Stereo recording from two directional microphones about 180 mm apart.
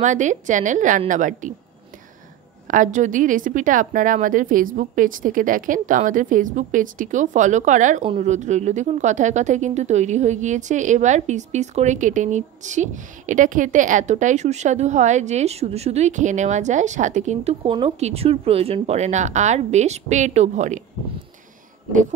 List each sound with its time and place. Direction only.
0.0 s a woman's voice: 45° right (ahead or behind)
2.7 s a woman's voice: 45° right (ahead or behind)